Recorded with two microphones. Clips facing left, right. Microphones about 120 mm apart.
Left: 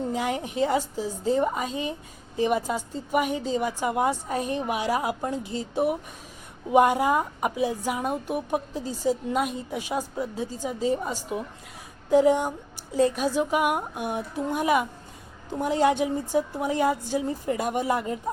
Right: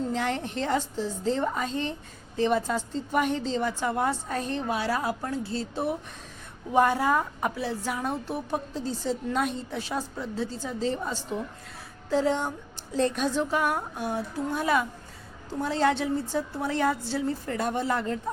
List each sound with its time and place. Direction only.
0.0 s a woman's voice: 10° left (ahead or behind)